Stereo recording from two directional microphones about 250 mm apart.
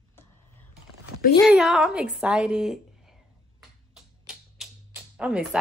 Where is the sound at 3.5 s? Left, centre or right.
Centre.